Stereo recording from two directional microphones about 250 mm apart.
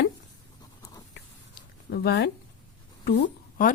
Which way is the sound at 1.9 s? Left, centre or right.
Left.